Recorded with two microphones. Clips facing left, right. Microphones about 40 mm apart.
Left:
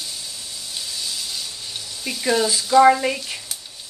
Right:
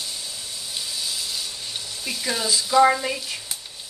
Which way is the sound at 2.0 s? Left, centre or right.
Centre.